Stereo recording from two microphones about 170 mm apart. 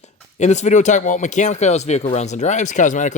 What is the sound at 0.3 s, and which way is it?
Speech, 45° left (ahead or behind).